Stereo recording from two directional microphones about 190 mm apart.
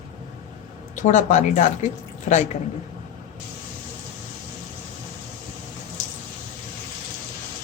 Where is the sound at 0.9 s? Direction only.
40° left (ahead or behind).